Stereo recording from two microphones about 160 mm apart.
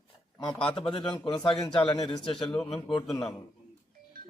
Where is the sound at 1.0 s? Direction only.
30° left (ahead or behind).